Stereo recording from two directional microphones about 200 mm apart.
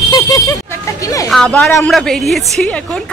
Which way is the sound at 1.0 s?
15° left (ahead or behind).